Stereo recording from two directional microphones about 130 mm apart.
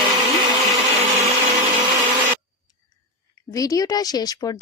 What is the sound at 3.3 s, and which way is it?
Speech, 25° left (ahead or behind).